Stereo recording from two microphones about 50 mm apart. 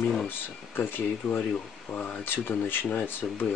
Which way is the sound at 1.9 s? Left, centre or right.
Left.